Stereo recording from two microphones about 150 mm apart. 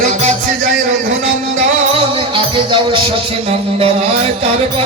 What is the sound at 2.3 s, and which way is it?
Music, 35° right (ahead or behind).